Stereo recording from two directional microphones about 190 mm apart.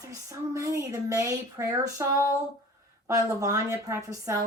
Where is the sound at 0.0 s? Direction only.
15° right (ahead or behind).